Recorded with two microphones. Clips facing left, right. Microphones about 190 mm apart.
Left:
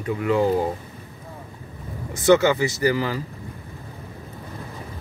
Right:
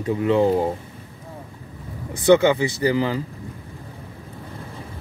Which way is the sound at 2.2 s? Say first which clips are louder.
Right 1 dB; 15° right (ahead or behind).